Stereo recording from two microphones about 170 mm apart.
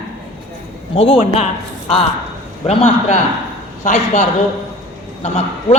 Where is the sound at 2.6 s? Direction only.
40° left (ahead or behind).